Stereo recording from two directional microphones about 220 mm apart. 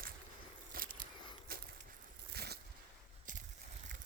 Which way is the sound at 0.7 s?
40° right (ahead or behind).